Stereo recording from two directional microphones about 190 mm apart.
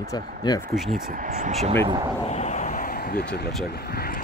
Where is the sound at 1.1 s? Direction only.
45° right (ahead or behind).